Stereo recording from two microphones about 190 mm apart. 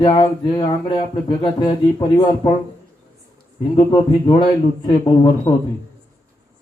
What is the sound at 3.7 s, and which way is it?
Speech, 25° left (ahead or behind).